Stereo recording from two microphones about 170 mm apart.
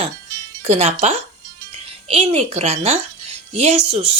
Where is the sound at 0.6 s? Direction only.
40° right (ahead or behind).